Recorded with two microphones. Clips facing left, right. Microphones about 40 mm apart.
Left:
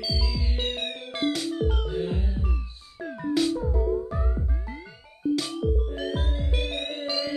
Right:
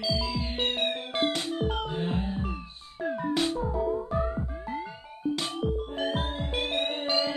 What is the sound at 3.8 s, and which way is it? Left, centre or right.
Music, right.